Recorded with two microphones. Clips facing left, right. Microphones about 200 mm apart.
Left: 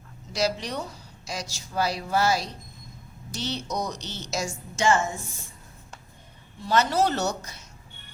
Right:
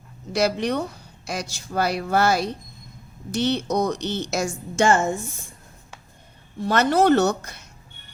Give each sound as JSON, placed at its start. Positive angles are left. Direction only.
{"t": 0.3, "sound": "a woman's voice", "side_deg": -60}
{"t": 6.6, "sound": "a woman's voice", "side_deg": -55}